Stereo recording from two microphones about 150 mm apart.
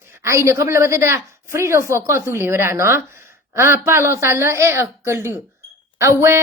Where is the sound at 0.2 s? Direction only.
20° right (ahead or behind).